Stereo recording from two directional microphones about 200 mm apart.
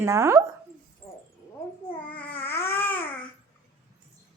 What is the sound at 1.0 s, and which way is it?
Dog, 15° left (ahead or behind).